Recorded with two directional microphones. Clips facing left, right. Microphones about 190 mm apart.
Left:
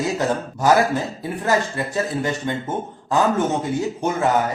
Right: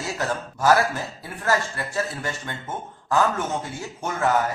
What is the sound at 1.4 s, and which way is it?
Speech, 20° left (ahead or behind).